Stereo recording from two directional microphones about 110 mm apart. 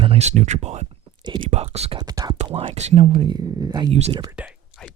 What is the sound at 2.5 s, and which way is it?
Speech, 70° right (ahead or behind).